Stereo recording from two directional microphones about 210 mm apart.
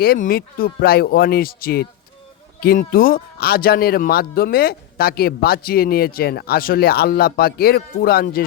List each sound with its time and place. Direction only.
0.0 s speech: 45° left (ahead or behind)